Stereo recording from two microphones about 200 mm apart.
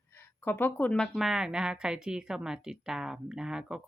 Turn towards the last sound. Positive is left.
turn(degrees=-5)  # may be behind; listen again after turning